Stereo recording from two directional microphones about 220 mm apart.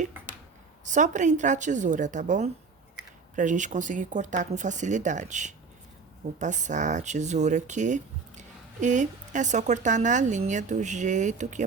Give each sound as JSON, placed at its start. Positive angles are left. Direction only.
{"t": 0.9, "sound": "speech", "side_deg": -35}